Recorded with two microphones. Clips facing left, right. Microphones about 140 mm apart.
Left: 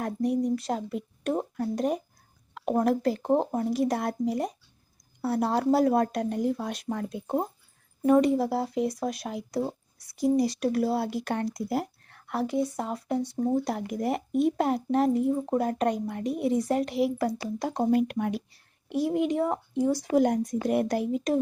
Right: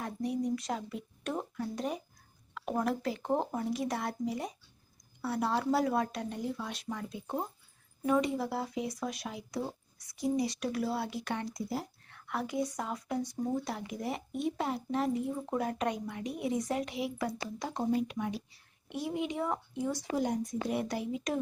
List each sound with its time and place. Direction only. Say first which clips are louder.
0.0 s speech: left 7 dB; 55° left (ahead or behind)
5.2 s speech: left 6 dB; 40° left (ahead or behind)
10.2 s speech: left 7 dB; 65° left (ahead or behind)
10.4 s speech: left 7 dB; 35° left (ahead or behind)
10.7 s speech: left 7 dB; 45° left (ahead or behind)
11.5 s speech: left 7 dB; 65° left (ahead or behind)
12.0 s speech: left 6 dB; 40° left (ahead or behind)
13.7 s speech: left 8 dB; 55° left (ahead or behind)
18.9 s speech: left 9 dB; 45° left (ahead or behind)
20.1 s speech: left 9 dB; 60° left (ahead or behind)